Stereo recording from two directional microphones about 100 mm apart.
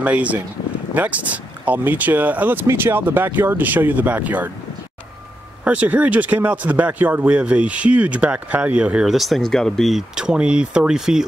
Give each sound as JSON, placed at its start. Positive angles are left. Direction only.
{"t": 0.0, "sound": "speech", "side_deg": -15}
{"t": 5.6, "sound": "speech", "side_deg": -15}